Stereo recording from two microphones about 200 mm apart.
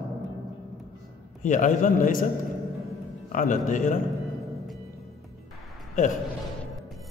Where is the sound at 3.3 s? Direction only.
40° left (ahead or behind).